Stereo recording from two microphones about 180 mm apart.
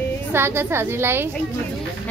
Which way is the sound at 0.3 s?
15° right (ahead or behind).